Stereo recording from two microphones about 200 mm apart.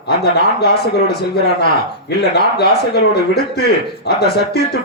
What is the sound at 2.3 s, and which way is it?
A man's voice, 55° left (ahead or behind).